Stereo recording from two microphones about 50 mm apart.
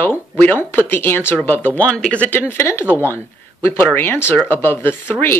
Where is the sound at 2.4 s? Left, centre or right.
Left.